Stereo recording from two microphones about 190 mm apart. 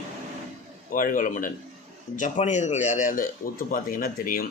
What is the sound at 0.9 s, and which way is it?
A man's voice, 45° left (ahead or behind).